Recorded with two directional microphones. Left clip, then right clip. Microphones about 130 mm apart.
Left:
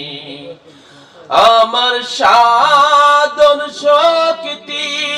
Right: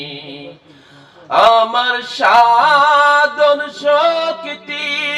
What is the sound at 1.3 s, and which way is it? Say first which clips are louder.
Music: left 2 dB; 20° left (ahead or behind).